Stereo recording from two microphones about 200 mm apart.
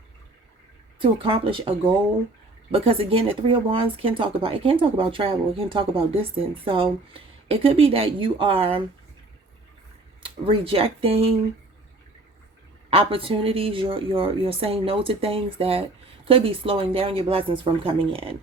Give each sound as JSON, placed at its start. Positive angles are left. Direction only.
{"t": 0.9, "sound": "speech", "side_deg": -25}
{"t": 10.2, "sound": "speech", "side_deg": -25}
{"t": 12.9, "sound": "speech", "side_deg": -30}